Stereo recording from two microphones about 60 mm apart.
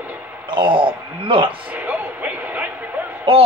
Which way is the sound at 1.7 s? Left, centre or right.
Right.